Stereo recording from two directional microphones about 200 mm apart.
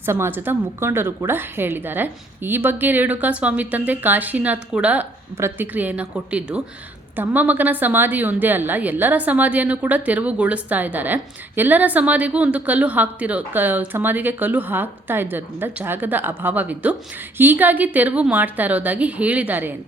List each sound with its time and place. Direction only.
0.0 s a woman's voice: 10° right (ahead or behind)